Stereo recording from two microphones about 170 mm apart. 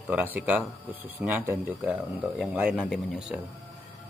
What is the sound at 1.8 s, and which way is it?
Speech, centre (ahead or behind).